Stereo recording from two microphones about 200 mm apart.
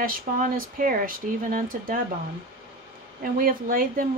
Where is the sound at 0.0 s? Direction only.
45° right (ahead or behind).